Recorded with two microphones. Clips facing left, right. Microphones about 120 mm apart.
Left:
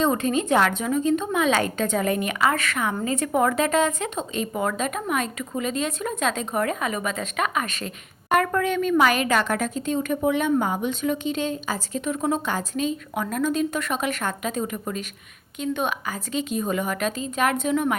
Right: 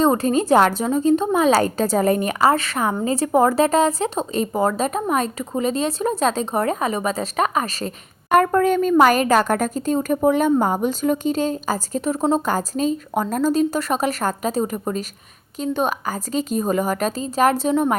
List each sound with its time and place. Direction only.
0.0 s speech: 35° right (ahead or behind)